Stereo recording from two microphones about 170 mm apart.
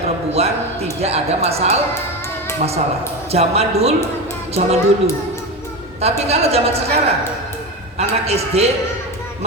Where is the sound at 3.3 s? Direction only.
35° right (ahead or behind).